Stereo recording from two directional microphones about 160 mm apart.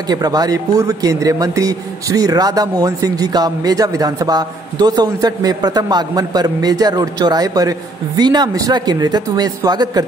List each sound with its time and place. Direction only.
0.1 s a man's voice: 25° right (ahead or behind)